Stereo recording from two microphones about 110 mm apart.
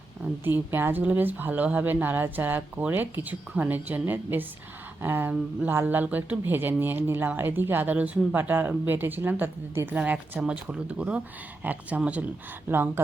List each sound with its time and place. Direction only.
0.4 s speech: 20° right (ahead or behind)